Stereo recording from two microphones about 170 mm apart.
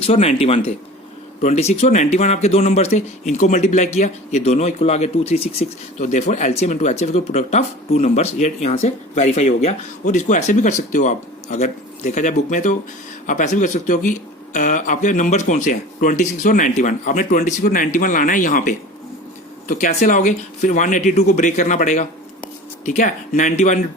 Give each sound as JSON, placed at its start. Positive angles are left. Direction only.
{"t": 0.0, "sound": "speech", "side_deg": 35}